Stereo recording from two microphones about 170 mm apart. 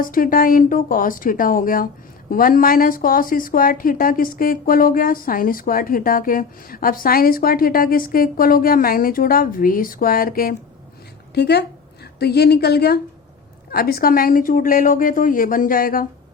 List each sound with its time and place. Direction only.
0.0 s a woman's voice: 55° left (ahead or behind)
11.3 s a woman's voice: 80° left; by 16.0 s 60° left (ahead or behind)